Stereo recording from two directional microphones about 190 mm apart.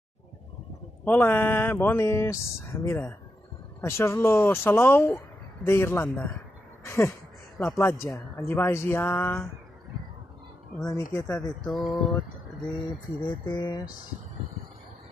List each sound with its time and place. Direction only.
1.0 s speech: 10° left (ahead or behind)
6.8 s a sound: 15° left (ahead or behind)
7.5 s speech: 10° left (ahead or behind)
10.8 s speech: 15° left (ahead or behind)
11.6 s mantra: centre (ahead or behind)
13.3 s speech: 20° left (ahead or behind)